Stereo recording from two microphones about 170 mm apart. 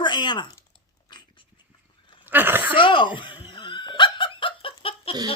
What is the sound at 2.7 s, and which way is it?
Speech, 30° left (ahead or behind).